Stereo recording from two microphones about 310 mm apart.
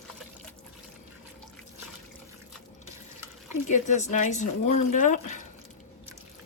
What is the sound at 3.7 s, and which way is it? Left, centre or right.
Speech, left.